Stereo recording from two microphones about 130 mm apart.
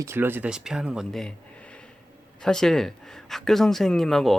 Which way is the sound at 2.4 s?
5° left (ahead or behind).